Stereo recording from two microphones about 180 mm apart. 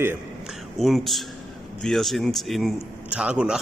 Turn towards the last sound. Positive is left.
turn(degrees=-5)  # may be behind; listen again after turning